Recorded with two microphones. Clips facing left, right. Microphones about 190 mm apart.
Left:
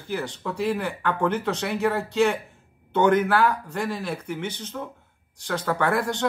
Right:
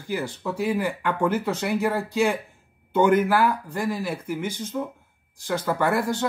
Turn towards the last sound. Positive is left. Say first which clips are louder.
# right 1 dB
turn(degrees=-5)  # may be behind; listen again after turning